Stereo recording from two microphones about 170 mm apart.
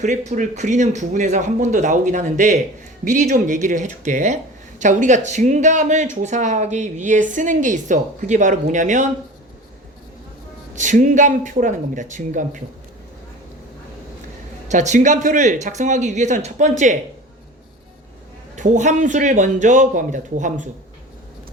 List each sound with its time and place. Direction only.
0.0 s a woman's voice: 45° right (ahead or behind)
10.8 s a woman's voice: 45° right (ahead or behind)
14.7 s a woman's voice: 45° right (ahead or behind)
18.5 s a woman's voice: 45° right (ahead or behind)